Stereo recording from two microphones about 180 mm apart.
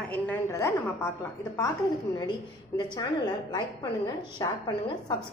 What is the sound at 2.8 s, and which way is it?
A woman's voice, 25° left (ahead or behind).